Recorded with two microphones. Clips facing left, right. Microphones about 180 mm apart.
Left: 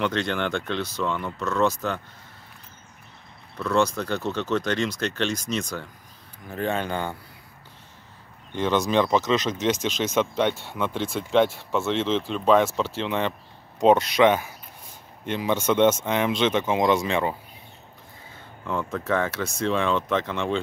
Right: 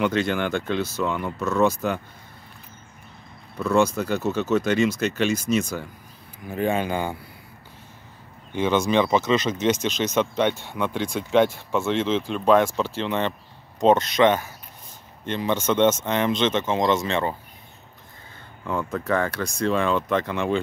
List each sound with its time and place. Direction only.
0.0 s speech: 5° right (ahead or behind)
3.5 s speech: 10° right (ahead or behind)
8.5 s speech: 5° right (ahead or behind)
18.7 s speech: centre (ahead or behind)